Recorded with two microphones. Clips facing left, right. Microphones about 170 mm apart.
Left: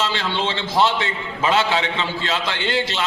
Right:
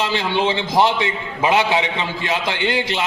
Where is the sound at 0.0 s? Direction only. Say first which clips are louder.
Right 4 dB; 15° right (ahead or behind).